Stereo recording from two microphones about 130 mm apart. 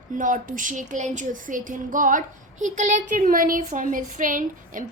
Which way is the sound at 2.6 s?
70° right (ahead or behind).